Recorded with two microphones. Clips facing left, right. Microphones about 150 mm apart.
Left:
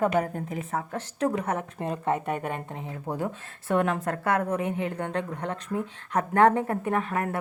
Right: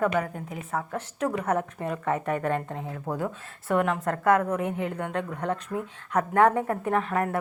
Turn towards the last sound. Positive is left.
turn(degrees=25)  # may be behind; listen again after turning